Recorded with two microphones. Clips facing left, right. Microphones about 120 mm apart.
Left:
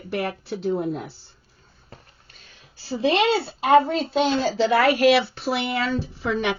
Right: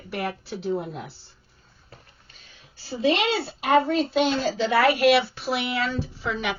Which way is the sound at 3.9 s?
30° left (ahead or behind).